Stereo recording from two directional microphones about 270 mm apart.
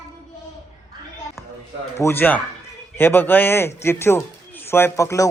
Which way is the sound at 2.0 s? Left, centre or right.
Centre.